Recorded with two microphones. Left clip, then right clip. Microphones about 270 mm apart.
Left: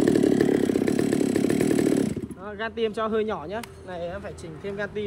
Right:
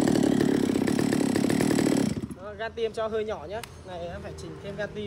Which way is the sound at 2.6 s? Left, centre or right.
Left.